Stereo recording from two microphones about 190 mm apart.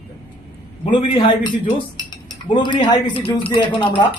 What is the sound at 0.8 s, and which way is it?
A man's voice, 25° left (ahead or behind).